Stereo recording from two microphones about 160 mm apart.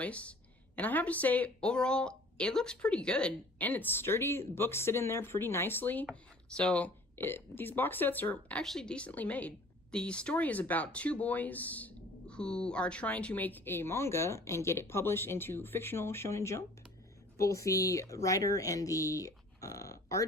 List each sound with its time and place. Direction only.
0.0 s speech: 10° left (ahead or behind)